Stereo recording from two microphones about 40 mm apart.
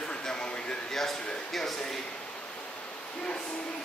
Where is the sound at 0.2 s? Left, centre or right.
Left.